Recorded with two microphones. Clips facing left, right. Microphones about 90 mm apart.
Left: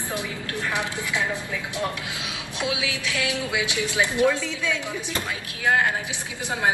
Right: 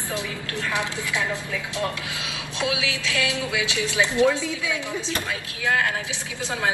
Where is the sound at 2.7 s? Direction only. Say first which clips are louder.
Right 1 dB; 20° left (ahead or behind).